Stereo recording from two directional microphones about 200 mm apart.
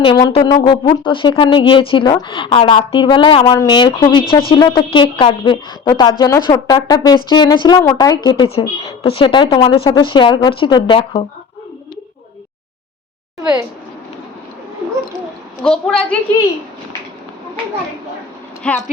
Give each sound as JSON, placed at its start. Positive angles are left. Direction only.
{"t": 0.0, "sound": "speech", "side_deg": 25}
{"t": 15.6, "sound": "a woman's voice", "side_deg": 5}
{"t": 18.6, "sound": "a woman's voice", "side_deg": 5}